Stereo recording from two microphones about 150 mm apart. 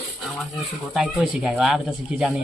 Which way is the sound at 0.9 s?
Centre (ahead or behind).